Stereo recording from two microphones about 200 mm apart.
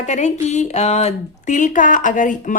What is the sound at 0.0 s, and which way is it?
A woman's voice, 35° left (ahead or behind).